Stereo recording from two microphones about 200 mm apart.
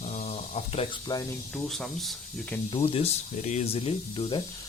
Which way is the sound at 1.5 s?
Centre (ahead or behind).